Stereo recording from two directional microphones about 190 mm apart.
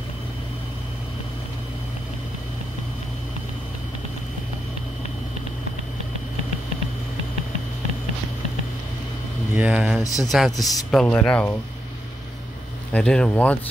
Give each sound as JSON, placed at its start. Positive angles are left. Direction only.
{"t": 9.6, "sound": "speech", "side_deg": -5}
{"t": 10.0, "sound": "speech", "side_deg": 15}
{"t": 10.6, "sound": "speech", "side_deg": 0}
{"t": 12.9, "sound": "speech", "side_deg": 5}